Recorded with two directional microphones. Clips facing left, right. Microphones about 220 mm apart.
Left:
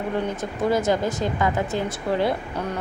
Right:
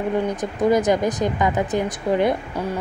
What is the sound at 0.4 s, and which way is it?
Speech, 15° right (ahead or behind).